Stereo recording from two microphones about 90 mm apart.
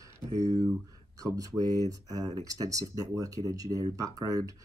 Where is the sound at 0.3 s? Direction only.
40° right (ahead or behind).